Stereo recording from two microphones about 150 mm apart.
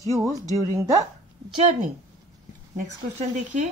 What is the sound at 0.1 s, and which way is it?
Speech, 20° right (ahead or behind).